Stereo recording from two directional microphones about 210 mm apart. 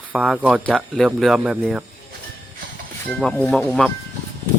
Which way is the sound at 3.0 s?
5° left (ahead or behind).